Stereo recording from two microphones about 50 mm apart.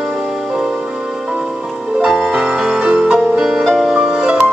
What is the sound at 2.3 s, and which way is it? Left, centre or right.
Music, centre.